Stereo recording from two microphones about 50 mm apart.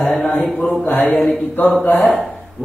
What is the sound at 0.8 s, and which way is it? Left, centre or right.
Speech, left.